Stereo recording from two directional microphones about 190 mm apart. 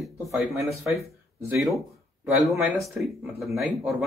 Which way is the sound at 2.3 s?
10° right (ahead or behind).